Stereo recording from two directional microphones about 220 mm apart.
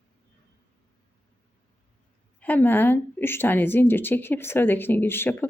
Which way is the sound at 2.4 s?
10° left (ahead or behind).